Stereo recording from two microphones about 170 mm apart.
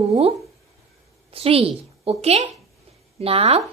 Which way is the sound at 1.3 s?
35° right (ahead or behind).